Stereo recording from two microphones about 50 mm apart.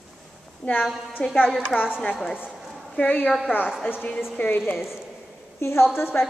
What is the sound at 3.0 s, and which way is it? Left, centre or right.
Speech, left.